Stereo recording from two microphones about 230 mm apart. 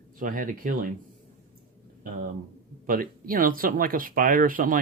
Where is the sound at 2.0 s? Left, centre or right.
Right.